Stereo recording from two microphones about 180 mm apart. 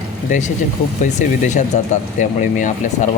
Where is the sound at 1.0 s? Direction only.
40° left (ahead or behind).